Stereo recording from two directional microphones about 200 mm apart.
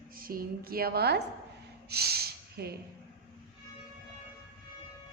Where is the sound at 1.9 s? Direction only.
50° right (ahead or behind).